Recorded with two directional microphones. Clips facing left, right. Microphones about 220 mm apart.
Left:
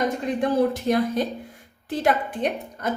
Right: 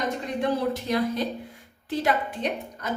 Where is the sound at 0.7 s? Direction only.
50° left (ahead or behind).